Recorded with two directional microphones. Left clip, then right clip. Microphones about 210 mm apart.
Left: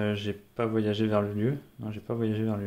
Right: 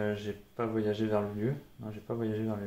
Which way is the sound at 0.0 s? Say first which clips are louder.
Left 3 dB; 50° left (ahead or behind).